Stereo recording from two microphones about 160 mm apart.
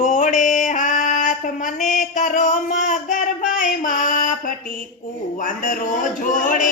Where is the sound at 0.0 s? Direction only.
55° left (ahead or behind).